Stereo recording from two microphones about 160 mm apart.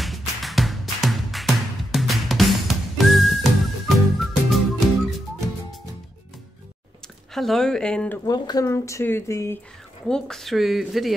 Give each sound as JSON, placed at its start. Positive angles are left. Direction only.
{"t": 0.0, "sound": "music", "side_deg": 0}
{"t": 7.3, "sound": "speech", "side_deg": 0}
{"t": 8.3, "sound": "speech", "side_deg": 25}
{"t": 10.0, "sound": "speech", "side_deg": 5}